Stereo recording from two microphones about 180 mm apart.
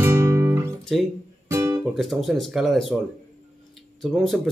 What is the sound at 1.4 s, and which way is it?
Music, 15° right (ahead or behind).